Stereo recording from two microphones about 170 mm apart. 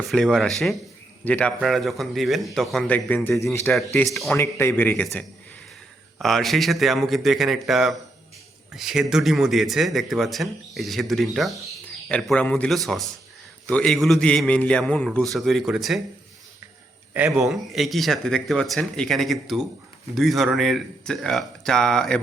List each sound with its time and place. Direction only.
0.0 s a man's voice: centre (ahead or behind)
3.4 s a man's voice: 15° left (ahead or behind)
3.7 s a man's voice: centre (ahead or behind)
4.4 s a man's voice: 15° left (ahead or behind)
6.1 s a man's voice: centre (ahead or behind)
17.3 s a man's voice: centre (ahead or behind)